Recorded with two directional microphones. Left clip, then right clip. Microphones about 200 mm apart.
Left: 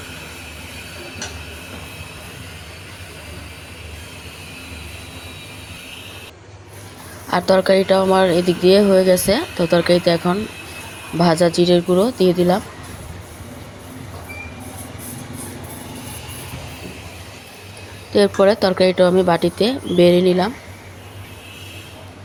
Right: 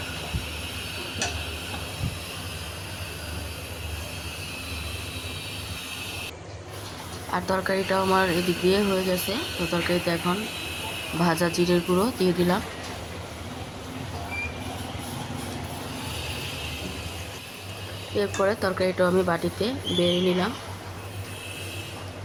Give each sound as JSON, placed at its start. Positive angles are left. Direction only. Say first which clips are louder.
{"t": 7.3, "sound": "speech", "louder": "left 11 dB", "side_deg": 25}
{"t": 18.1, "sound": "speech", "louder": "left 11 dB", "side_deg": 25}